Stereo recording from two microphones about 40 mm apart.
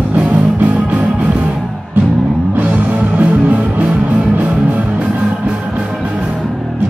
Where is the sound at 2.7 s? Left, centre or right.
Right.